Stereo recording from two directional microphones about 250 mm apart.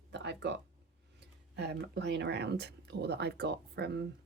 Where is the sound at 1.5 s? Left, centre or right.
Right.